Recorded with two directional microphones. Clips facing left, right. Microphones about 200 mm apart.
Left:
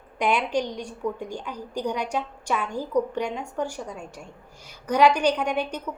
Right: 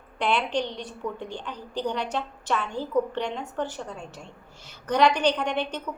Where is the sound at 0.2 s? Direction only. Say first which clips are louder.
Left 2 dB; 10° left (ahead or behind).